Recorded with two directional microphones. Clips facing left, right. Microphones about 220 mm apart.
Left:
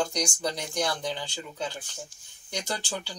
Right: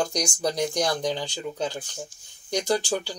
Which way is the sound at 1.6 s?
40° right (ahead or behind).